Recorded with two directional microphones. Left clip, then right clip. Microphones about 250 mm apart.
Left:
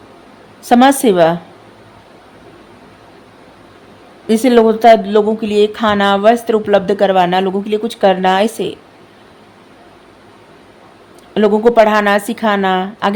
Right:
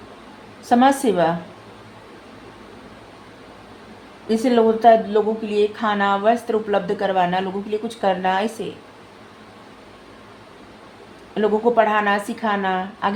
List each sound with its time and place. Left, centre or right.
0.7 s speech: left
4.3 s speech: left
11.3 s speech: left